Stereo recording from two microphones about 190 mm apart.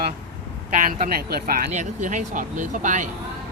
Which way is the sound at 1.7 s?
40° right (ahead or behind).